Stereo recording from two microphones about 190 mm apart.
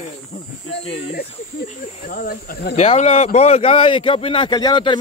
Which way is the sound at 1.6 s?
40° left (ahead or behind).